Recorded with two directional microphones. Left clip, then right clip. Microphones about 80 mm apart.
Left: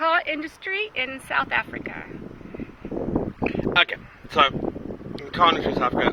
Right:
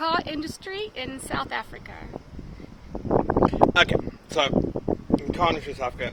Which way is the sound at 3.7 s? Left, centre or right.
Right.